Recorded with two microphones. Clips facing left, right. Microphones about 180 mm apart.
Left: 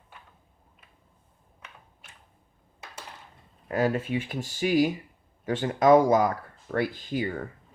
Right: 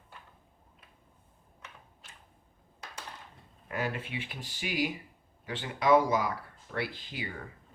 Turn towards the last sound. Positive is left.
turn(degrees=45)  # may be behind; listen again after turning